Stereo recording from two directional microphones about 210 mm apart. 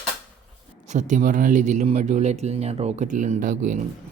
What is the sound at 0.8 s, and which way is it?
Speech, 35° right (ahead or behind).